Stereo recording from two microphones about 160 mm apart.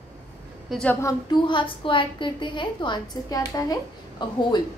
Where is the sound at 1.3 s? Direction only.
30° left (ahead or behind).